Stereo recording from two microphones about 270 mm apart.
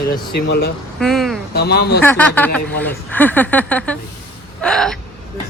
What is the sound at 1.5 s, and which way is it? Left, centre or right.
Speech, left.